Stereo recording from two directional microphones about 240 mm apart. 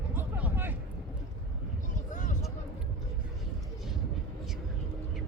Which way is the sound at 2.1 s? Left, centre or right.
Left.